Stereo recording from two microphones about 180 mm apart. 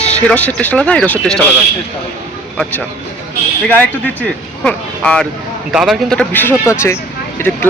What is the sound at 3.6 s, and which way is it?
Speech, 10° left (ahead or behind).